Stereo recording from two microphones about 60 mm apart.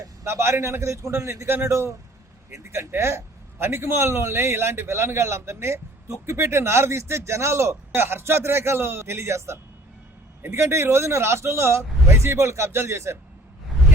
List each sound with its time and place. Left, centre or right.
0.3 s a man's voice: right